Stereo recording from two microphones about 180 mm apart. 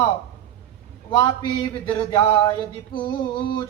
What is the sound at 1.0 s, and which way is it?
Speech, 25° left (ahead or behind).